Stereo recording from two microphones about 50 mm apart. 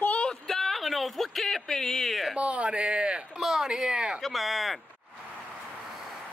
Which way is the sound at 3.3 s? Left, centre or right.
Centre.